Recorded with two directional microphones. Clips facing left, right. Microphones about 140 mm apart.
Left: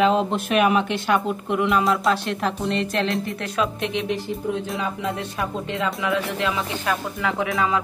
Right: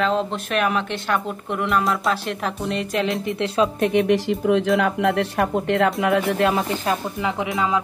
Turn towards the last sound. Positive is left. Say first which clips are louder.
# even
turn(degrees=-20)  # may be behind; listen again after turning